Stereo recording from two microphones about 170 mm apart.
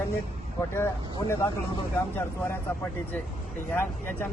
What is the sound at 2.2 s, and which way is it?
Speech, 10° left (ahead or behind).